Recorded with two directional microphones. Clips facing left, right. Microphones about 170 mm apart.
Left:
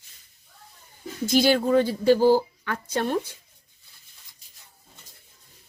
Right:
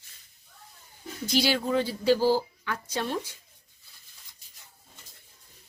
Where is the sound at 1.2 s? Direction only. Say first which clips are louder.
Left 6 dB; 50° left (ahead or behind).